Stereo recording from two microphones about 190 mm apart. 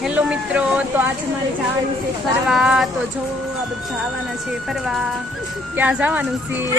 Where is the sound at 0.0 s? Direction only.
5° right (ahead or behind).